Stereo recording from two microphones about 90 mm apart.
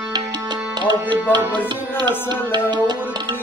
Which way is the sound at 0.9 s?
55° right (ahead or behind).